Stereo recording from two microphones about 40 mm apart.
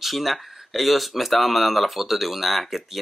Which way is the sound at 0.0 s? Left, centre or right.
Centre.